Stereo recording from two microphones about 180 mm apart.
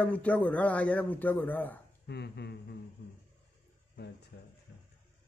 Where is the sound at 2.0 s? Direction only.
65° left (ahead or behind).